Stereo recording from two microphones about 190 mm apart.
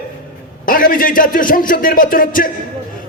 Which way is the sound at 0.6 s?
45° left (ahead or behind).